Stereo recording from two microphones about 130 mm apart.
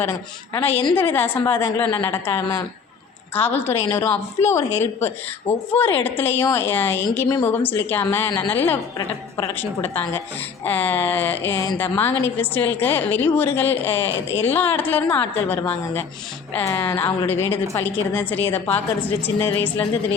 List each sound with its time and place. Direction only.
0.6 s speech: 15° left (ahead or behind)